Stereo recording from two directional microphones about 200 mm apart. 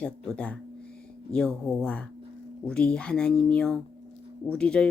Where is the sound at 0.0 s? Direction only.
5° left (ahead or behind).